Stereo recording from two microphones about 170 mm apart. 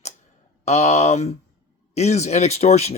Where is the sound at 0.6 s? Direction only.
40° left (ahead or behind).